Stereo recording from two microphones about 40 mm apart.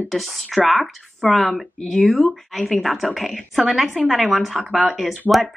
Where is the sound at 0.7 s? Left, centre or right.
Centre.